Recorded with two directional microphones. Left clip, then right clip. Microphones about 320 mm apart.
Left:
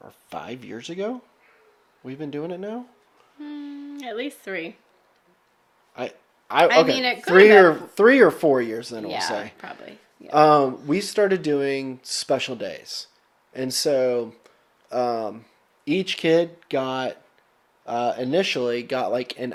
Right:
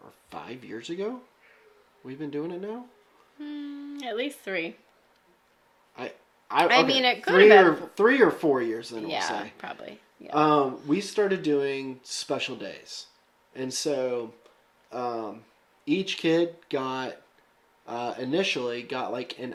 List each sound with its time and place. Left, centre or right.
0.0 s speech: left
3.4 s speech: centre
5.9 s a sound: left
6.7 s speech: centre
7.6 s speech: left
9.6 s speech: centre
10.3 s speech: left